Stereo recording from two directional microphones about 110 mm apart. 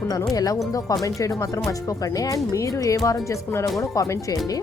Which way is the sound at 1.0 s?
30° left (ahead or behind).